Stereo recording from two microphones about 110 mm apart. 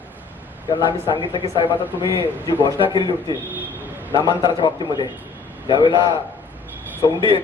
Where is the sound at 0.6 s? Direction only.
45° left (ahead or behind).